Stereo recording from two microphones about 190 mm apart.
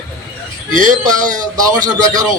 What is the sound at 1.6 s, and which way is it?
Speech, 20° right (ahead or behind).